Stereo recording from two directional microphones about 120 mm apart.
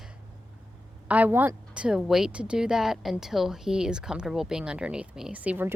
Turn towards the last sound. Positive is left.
turn(degrees=-15)  # may be behind; listen again after turning